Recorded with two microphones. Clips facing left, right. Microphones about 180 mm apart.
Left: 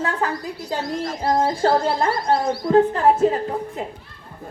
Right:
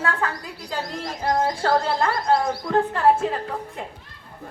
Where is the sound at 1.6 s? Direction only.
30° left (ahead or behind).